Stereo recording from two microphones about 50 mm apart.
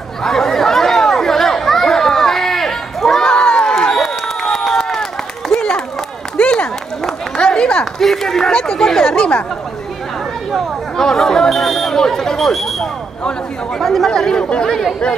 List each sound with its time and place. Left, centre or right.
0.2 s chatter: centre
5.5 s run: centre
6.3 s a sound: left
7.8 s speech: centre
9.1 s speech: left
10.5 s speech: centre
13.7 s speech: centre
14.3 s speech: centre